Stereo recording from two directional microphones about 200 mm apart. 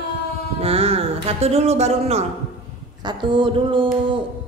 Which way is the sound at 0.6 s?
30° right (ahead or behind).